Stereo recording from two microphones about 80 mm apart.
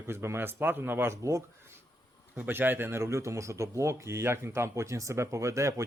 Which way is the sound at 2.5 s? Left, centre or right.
Right.